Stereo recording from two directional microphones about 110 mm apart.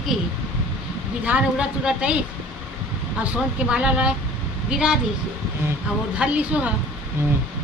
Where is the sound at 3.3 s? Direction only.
10° right (ahead or behind).